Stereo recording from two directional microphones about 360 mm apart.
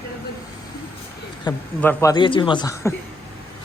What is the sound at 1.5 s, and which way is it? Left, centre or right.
A man's voice, centre.